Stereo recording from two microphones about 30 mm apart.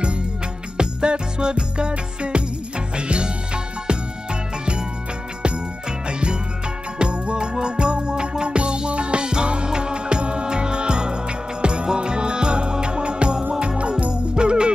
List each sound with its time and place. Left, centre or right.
0.7 s music: right
7.0 s music: right
13.7 s music: right
14.3 s music: right